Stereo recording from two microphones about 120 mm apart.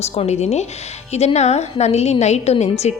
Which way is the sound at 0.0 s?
65° left (ahead or behind).